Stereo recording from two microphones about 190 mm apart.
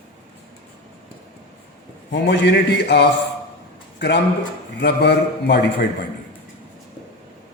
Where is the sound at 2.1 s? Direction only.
65° left (ahead or behind).